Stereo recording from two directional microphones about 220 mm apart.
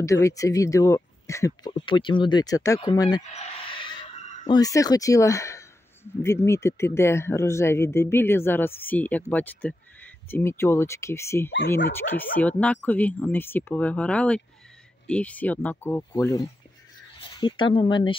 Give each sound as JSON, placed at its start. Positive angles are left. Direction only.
{"t": 0.0, "sound": "speech", "side_deg": 15}
{"t": 3.3, "sound": "a sound", "side_deg": 25}
{"t": 4.5, "sound": "speech", "side_deg": 15}